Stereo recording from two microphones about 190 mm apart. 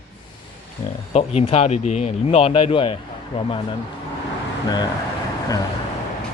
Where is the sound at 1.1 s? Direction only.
35° left (ahead or behind).